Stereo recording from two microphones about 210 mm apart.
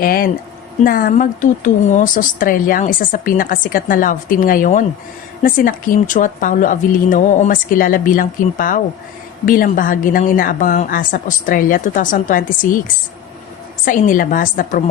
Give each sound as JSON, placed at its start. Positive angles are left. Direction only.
{"t": 0.0, "sound": "speech", "side_deg": 45}
{"t": 13.8, "sound": "speech", "side_deg": 40}